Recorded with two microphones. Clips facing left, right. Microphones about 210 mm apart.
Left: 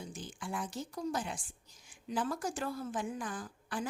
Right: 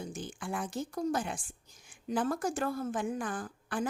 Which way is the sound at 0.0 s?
50° right (ahead or behind).